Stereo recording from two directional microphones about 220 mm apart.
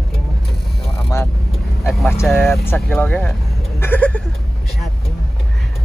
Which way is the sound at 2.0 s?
Centre (ahead or behind).